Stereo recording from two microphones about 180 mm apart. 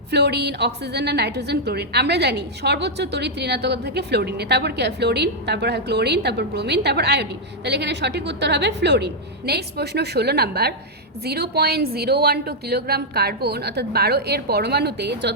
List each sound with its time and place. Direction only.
0.1 s a woman's voice: 70° right (ahead or behind)